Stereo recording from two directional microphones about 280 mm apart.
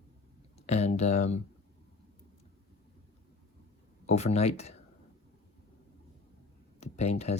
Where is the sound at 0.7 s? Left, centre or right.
Left.